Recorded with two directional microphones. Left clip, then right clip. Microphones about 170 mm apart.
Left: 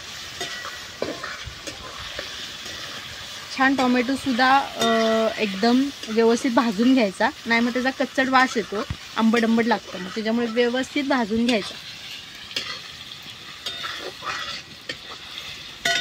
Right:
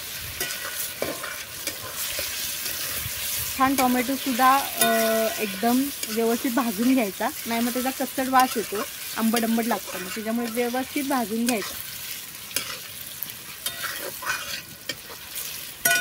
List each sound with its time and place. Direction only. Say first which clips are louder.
3.5 s speech: left 2 dB; 60° left (ahead or behind)
4.8 s frying: left 2 dB; 45° left (ahead or behind)